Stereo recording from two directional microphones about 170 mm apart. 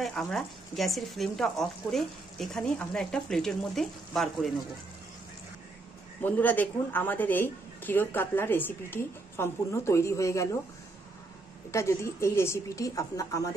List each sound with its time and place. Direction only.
0.0 s speech: centre (ahead or behind)
6.2 s speech: 10° left (ahead or behind)
11.7 s a woman's voice: 15° left (ahead or behind)